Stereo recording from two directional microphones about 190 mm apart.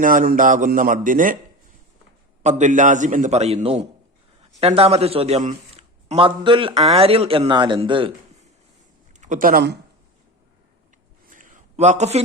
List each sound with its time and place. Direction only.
0.0 s speech: 45° right (ahead or behind)
2.4 s a man's voice: 40° right (ahead or behind)
9.2 s speech: 45° right (ahead or behind)
11.3 s a sound: 40° right (ahead or behind)